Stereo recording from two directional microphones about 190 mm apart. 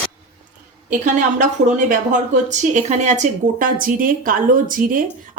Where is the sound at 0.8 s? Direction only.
40° right (ahead or behind).